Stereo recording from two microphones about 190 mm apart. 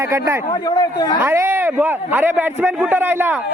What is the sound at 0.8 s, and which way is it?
Speech, 20° left (ahead or behind).